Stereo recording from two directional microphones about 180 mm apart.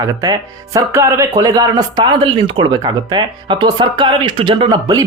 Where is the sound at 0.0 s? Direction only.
20° right (ahead or behind).